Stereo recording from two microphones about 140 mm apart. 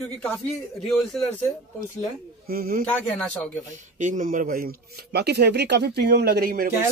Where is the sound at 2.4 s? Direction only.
90° right.